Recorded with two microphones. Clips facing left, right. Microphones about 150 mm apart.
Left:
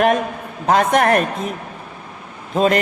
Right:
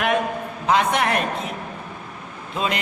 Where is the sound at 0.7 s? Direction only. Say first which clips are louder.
Left 5 dB; 45° left (ahead or behind).